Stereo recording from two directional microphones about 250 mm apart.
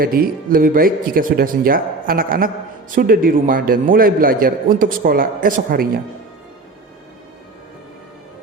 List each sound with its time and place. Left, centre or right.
0.0 s a man's voice: right